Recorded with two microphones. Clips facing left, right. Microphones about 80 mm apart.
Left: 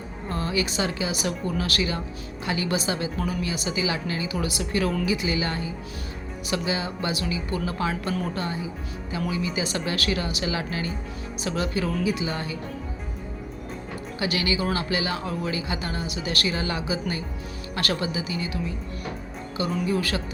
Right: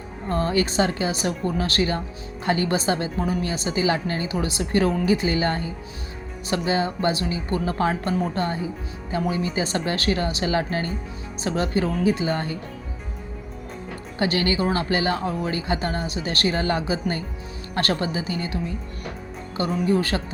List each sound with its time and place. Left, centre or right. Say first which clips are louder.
0.3 s speech: right 5 dB; right
14.2 s speech: right 4 dB; right